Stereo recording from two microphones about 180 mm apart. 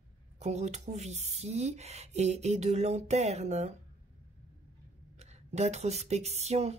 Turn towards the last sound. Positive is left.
turn(degrees=-35)  # may be behind; listen again after turning